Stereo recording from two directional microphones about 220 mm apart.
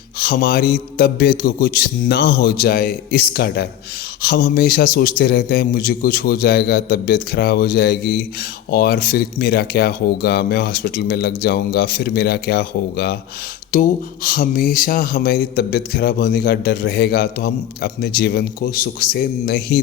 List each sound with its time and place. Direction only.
0.2 s a man's voice: 45° left (ahead or behind)